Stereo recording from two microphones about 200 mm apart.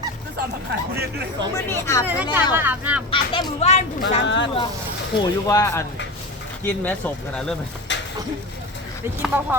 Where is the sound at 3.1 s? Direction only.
25° left (ahead or behind).